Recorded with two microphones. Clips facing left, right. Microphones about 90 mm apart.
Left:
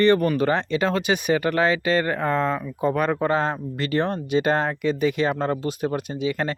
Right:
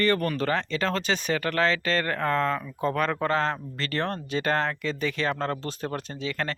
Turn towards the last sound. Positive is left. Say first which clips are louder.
# left 6 dB
turn(degrees=15)  # may be behind; listen again after turning